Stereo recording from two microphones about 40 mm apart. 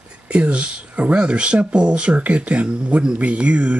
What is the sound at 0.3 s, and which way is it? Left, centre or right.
Speech, right.